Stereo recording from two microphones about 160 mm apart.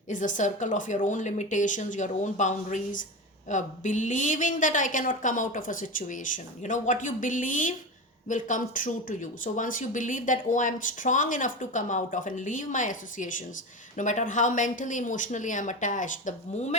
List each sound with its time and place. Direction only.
0.1 s speech: 55° left (ahead or behind)